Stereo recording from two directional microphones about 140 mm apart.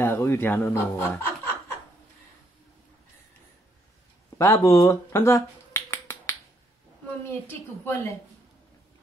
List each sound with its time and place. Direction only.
0.0 s a man's voice: 20° left (ahead or behind)
4.4 s finger snapping: 20° left (ahead or behind)
7.2 s a man's voice: 15° left (ahead or behind)